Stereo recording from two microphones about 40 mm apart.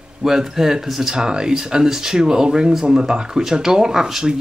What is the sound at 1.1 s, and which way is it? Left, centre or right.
Speech, centre.